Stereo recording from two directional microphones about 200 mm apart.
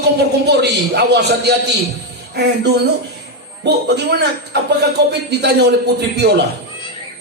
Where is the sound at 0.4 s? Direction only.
55° right (ahead or behind).